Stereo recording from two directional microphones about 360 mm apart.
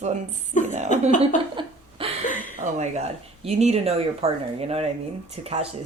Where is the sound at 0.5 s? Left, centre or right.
Left.